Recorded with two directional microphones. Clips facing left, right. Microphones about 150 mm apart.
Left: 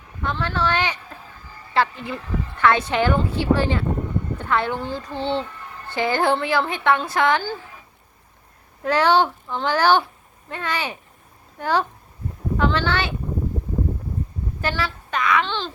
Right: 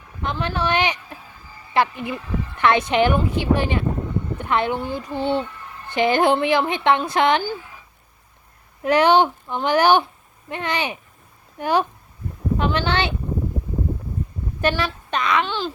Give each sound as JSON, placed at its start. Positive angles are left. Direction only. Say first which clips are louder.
{"t": 0.2, "sound": "a sound", "louder": "even", "side_deg": -15}
{"t": 1.7, "sound": "a woman's voice", "louder": "right 1 dB", "side_deg": -15}
{"t": 8.8, "sound": "a woman's voice", "louder": "right 2 dB", "side_deg": -15}
{"t": 14.6, "sound": "a woman's voice", "louder": "right 4 dB", "side_deg": -15}